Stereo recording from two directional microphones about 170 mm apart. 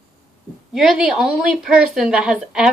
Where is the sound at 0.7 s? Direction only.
5° right (ahead or behind).